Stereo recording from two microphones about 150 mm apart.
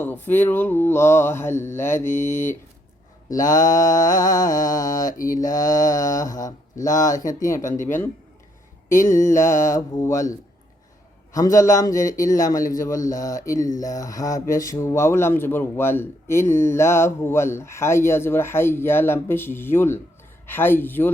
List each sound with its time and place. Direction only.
0.0 s speech: 15° left (ahead or behind)
5.1 s mantra: 65° left (ahead or behind)
5.5 s speech: 25° left (ahead or behind)